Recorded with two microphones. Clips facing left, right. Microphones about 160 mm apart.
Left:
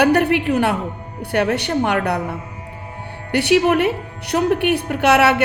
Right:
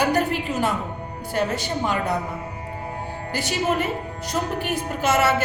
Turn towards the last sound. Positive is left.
turn(degrees=70)  # may be behind; listen again after turning